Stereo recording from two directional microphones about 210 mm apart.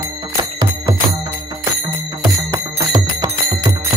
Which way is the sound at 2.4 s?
15° right (ahead or behind).